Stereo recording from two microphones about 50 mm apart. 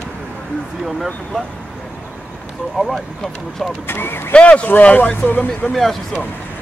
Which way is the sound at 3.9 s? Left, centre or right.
Left.